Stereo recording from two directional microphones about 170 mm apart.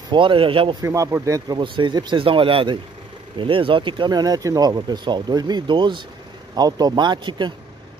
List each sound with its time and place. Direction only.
0.1 s speech: 30° right (ahead or behind)
0.8 s speech: 15° right (ahead or behind)